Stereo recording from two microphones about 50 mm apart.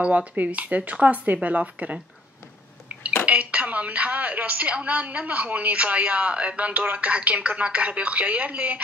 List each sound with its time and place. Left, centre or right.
0.0 s a woman's voice: right
2.9 s a sound: right
3.3 s a woman's voice: right